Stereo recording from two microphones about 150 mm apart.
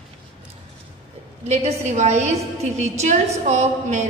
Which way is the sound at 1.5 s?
50° right (ahead or behind).